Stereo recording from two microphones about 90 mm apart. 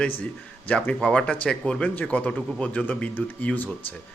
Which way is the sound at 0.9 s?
10° left (ahead or behind).